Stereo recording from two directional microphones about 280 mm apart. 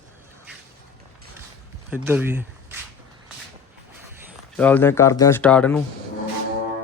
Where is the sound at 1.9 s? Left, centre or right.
Centre.